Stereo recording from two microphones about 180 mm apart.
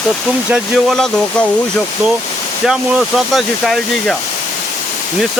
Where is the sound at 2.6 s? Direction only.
Centre (ahead or behind).